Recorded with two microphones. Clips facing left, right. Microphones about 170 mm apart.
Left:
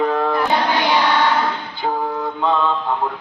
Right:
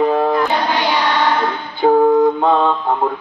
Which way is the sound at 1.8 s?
55° right (ahead or behind).